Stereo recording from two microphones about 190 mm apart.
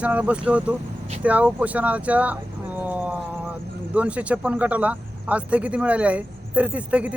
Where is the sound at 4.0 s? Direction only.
5° right (ahead or behind).